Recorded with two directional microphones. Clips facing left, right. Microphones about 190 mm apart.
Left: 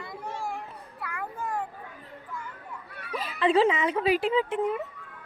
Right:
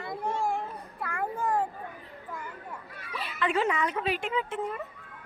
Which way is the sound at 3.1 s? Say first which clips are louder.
Left 6 dB; 40° left (ahead or behind).